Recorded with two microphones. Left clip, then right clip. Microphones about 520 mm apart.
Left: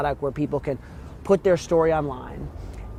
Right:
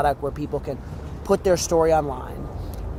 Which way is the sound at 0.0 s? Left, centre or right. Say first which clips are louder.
Right 2 dB; left.